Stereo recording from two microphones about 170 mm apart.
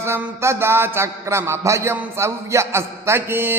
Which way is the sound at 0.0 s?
15° right (ahead or behind).